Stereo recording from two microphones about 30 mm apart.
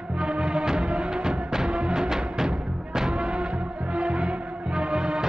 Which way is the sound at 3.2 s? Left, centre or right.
Right.